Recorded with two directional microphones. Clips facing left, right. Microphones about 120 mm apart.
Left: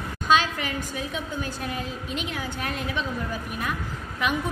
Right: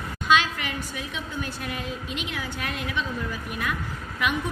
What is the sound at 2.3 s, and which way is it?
Speech, 40° left (ahead or behind).